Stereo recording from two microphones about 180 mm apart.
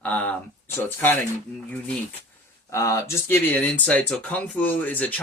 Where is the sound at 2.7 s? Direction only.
15° left (ahead or behind).